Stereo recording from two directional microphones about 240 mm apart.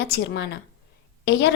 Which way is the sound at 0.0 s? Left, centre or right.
Left.